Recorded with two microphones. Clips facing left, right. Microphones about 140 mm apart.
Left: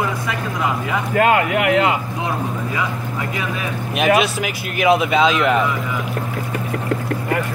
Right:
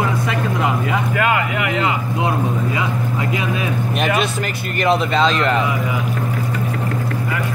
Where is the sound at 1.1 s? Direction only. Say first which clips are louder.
Left 7 dB; 45° left (ahead or behind).